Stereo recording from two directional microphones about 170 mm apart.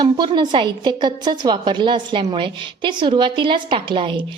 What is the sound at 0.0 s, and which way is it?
A woman's voice, 25° right (ahead or behind).